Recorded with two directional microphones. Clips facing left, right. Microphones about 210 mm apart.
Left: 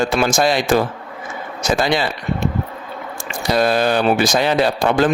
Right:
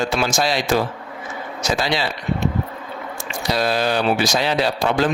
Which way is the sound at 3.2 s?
50° left (ahead or behind).